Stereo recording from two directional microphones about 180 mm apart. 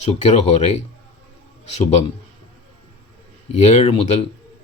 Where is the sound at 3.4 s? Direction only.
35° left (ahead or behind).